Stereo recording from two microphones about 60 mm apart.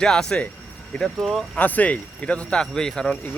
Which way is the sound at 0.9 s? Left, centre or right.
Left.